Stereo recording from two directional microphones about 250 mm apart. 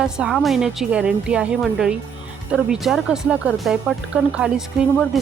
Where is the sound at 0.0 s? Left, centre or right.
Centre.